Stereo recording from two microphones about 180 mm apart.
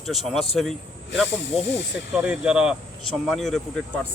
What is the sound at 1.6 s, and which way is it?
Speech, 80° left.